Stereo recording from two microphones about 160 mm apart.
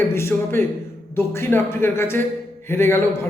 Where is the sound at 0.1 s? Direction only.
15° left (ahead or behind).